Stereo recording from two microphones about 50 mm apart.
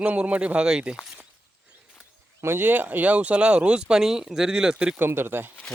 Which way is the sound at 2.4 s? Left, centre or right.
Right.